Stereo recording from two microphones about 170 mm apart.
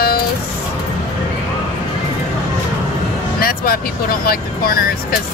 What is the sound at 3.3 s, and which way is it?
Vehicle, 60° left (ahead or behind).